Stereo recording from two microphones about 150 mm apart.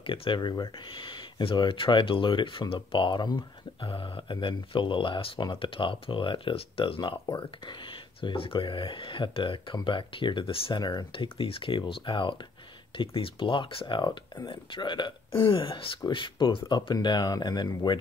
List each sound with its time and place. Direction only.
0.0 s speech: 35° left (ahead or behind)